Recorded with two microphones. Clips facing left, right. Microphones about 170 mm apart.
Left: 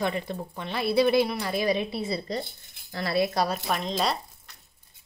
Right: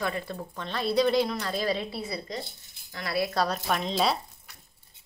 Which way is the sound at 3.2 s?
15° left (ahead or behind).